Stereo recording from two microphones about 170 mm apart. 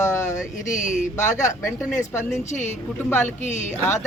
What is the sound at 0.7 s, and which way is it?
Speech, 45° left (ahead or behind).